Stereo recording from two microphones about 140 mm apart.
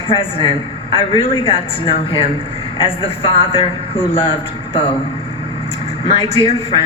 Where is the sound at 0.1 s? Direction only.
40° left (ahead or behind).